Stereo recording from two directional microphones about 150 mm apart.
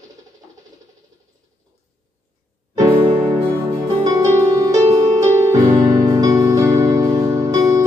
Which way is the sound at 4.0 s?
25° right (ahead or behind).